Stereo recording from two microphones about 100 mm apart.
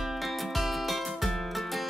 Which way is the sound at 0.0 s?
Centre (ahead or behind).